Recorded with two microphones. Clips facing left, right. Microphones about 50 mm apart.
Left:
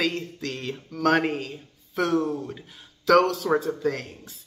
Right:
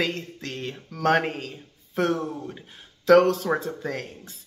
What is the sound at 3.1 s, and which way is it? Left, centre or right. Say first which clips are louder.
Speech: right 2 dB; right.